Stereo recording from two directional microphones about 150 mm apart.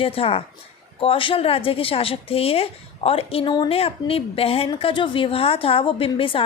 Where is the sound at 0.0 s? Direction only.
40° left (ahead or behind).